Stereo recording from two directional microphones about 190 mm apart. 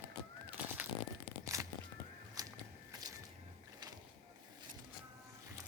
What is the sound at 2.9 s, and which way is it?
Whip, 20° right (ahead or behind).